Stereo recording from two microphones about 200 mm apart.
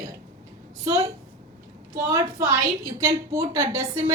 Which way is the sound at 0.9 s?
15° right (ahead or behind).